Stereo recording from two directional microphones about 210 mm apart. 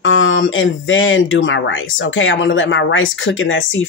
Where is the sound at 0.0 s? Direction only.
70° left (ahead or behind).